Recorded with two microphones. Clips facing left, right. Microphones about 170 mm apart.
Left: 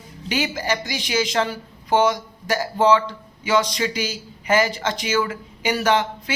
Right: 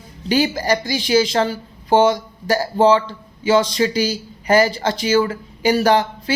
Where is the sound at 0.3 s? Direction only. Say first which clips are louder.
Right 6 dB; 35° right (ahead or behind).